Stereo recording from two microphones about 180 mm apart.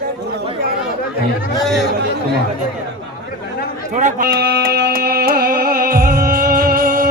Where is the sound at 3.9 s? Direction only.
40° right (ahead or behind).